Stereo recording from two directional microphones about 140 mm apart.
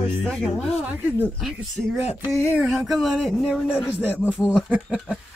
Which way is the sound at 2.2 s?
20° left (ahead or behind).